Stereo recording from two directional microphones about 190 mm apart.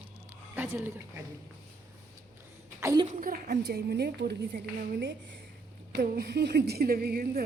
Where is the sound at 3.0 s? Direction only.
45° right (ahead or behind).